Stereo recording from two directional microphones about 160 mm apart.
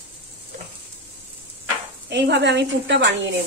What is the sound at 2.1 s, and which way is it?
Speech, 90° right.